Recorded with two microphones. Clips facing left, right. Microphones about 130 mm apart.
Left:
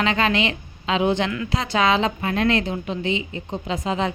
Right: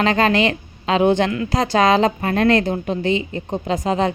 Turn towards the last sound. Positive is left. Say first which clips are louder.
# right 5 dB
turn(degrees=-45)  # may be behind; listen again after turning